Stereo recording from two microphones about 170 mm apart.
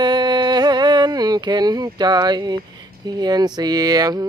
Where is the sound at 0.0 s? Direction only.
25° right (ahead or behind).